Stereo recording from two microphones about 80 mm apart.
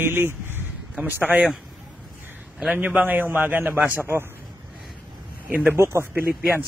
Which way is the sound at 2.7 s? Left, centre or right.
Right.